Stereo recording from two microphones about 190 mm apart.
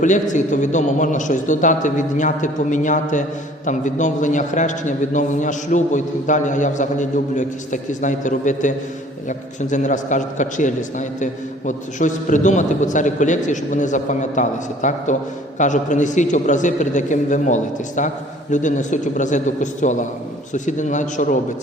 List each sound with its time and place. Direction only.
0.0 s a man's voice: 40° left (ahead or behind)